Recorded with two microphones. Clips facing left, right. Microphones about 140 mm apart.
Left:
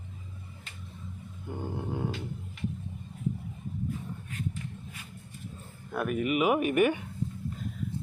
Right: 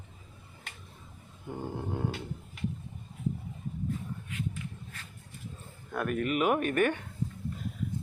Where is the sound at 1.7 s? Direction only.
Centre (ahead or behind).